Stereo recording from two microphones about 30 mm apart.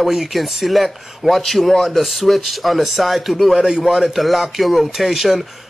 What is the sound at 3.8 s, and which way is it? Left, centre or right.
A man's voice, centre.